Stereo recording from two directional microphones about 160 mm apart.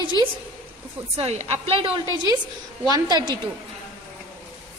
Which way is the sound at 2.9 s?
25° right (ahead or behind).